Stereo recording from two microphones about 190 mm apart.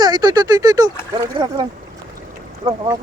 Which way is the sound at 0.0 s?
20° right (ahead or behind).